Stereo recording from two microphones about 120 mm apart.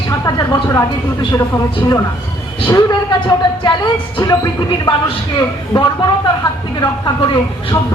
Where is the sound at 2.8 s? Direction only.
35° left (ahead or behind).